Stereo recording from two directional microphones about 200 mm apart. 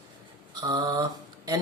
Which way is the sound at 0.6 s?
20° right (ahead or behind).